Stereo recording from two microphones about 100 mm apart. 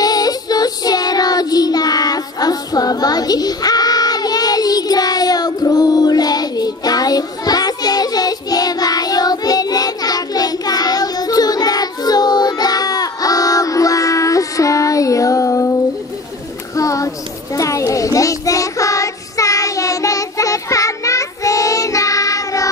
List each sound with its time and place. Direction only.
0.0 s child singing: 40° left (ahead or behind)
16.7 s a sound: 35° left (ahead or behind)
17.6 s child singing: 35° left (ahead or behind)